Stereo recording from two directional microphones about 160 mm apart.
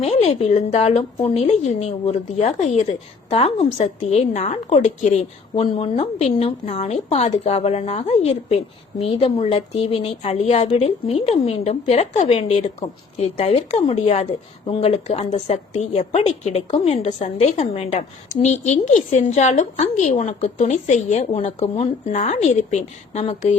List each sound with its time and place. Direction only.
0.0 s a woman's voice: 45° left (ahead or behind)